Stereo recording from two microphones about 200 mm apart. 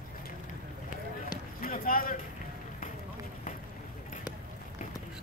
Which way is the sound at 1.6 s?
45° left (ahead or behind).